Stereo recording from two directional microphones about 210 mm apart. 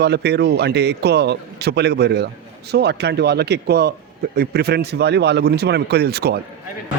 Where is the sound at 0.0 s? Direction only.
50° right (ahead or behind).